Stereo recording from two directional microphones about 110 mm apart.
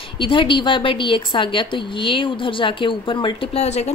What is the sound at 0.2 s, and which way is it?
A woman's voice, 50° left (ahead or behind).